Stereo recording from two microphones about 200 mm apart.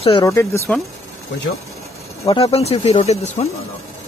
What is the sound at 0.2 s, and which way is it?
Speech, 15° left (ahead or behind).